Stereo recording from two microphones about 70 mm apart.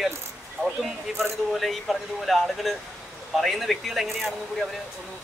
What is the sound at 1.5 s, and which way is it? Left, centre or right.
Speech, centre.